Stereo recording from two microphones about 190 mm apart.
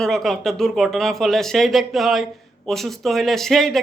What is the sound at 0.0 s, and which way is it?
Speech, centre (ahead or behind).